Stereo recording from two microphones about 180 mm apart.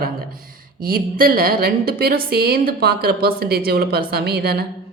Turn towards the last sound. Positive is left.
turn(degrees=-60)  # may be behind; listen again after turning